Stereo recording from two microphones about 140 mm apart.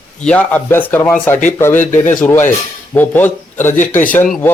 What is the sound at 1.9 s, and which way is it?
Speech, 60° left (ahead or behind).